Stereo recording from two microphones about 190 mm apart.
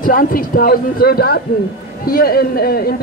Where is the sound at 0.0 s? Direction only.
50° left (ahead or behind).